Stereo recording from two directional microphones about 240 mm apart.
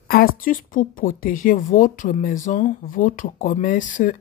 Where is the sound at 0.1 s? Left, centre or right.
Left.